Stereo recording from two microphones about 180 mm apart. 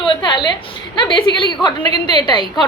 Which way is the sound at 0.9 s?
25° left (ahead or behind).